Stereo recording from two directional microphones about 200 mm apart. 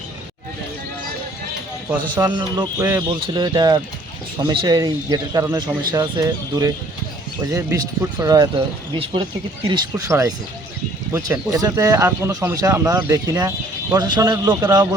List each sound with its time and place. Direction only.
2.1 s speech: 20° right (ahead or behind)